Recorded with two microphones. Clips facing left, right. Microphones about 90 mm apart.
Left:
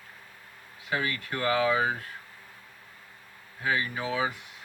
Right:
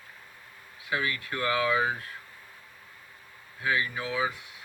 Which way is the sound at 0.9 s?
30° left (ahead or behind).